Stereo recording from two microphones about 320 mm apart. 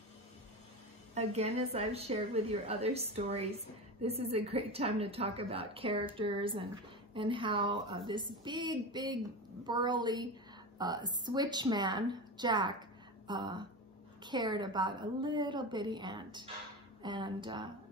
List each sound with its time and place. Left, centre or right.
1.1 s a woman's voice: centre